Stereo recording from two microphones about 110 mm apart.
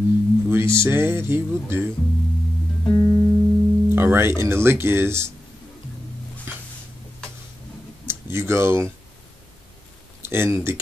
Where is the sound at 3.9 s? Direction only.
20° right (ahead or behind).